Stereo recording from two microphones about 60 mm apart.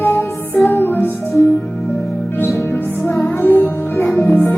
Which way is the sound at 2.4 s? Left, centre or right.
Left.